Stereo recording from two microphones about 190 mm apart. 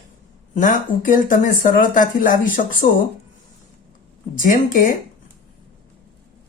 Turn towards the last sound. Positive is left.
turn(degrees=45)  # may be behind; listen again after turning